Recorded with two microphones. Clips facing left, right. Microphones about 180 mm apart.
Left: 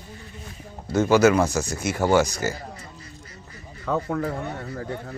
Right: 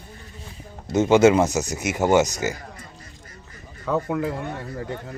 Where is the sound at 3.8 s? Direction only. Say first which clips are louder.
Right 1 dB; 10° right (ahead or behind).